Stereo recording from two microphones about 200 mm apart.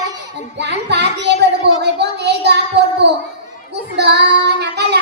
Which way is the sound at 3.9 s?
55° right (ahead or behind).